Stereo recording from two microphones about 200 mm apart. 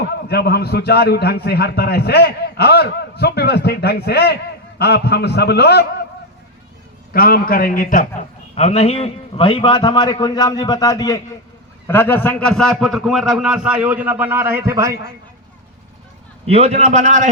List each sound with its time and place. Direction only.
0.3 s a man's voice: 50° left (ahead or behind)
7.1 s a man's voice: 50° left (ahead or behind)
8.5 s a man's voice: 35° left (ahead or behind); by 14.9 s 15° right (ahead or behind)
16.5 s a man's voice: 30° right (ahead or behind)